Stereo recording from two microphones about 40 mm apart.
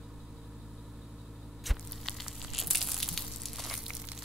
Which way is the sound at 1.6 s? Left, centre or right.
Centre.